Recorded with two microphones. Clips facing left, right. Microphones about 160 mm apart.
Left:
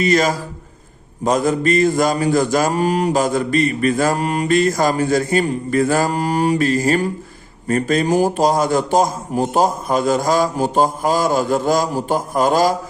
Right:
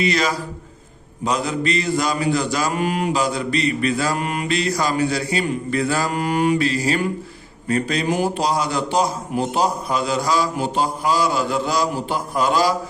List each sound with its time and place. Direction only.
0.0 s mantra: 45° left (ahead or behind)